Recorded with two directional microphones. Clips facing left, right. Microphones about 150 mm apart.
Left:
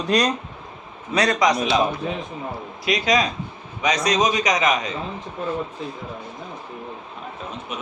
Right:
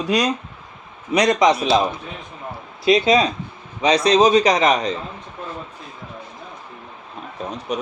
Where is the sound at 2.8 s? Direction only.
25° right (ahead or behind).